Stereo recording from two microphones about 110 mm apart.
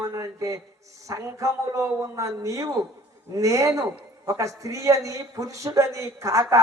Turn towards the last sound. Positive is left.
turn(degrees=-30)  # may be behind; listen again after turning